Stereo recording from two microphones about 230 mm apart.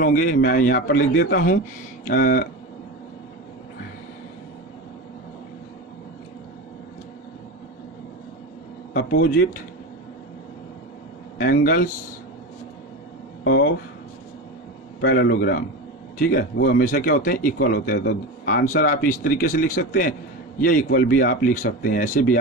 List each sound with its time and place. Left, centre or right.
0.0 s speech: left
8.9 s speech: left
11.3 s speech: left
13.4 s a sound: left
15.0 s a man's voice: left